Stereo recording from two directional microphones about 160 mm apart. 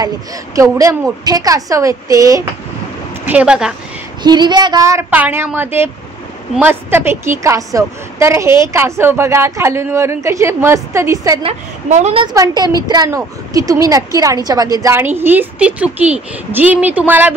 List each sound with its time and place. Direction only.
0.6 s a woman's voice: 20° right (ahead or behind)
3.3 s speech: 5° right (ahead or behind)
4.2 s a woman's voice: 25° right (ahead or behind)
11.4 s a woman's voice: 40° right (ahead or behind)
12.4 s a woman's voice: 25° right (ahead or behind)